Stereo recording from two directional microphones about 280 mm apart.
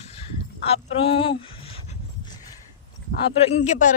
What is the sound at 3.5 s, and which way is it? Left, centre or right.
Speech, left.